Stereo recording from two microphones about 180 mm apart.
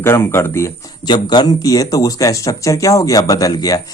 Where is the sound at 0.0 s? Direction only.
15° left (ahead or behind).